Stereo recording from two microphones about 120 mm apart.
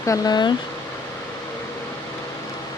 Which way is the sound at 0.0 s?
30° left (ahead or behind).